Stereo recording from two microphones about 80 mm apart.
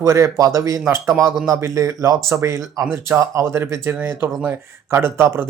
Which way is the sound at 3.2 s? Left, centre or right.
Right.